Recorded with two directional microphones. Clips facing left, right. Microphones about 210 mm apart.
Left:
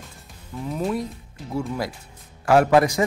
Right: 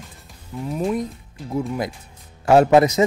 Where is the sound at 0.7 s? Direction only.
Centre (ahead or behind).